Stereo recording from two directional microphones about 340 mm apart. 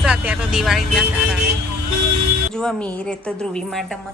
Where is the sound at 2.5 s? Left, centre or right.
Centre.